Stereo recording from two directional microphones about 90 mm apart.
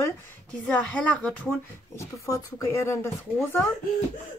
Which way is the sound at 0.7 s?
5° left (ahead or behind).